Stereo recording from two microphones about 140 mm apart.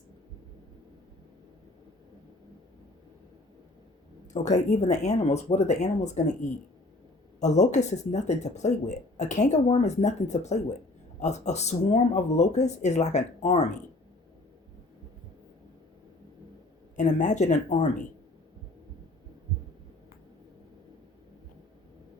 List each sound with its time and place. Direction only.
4.3 s speech: 60° left (ahead or behind)
17.0 s speech: 60° left (ahead or behind)